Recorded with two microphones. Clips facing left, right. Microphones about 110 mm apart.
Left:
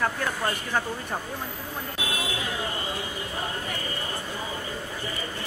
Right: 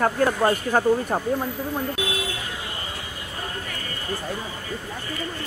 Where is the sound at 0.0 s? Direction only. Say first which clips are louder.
Right 7 dB; 40° right (ahead or behind).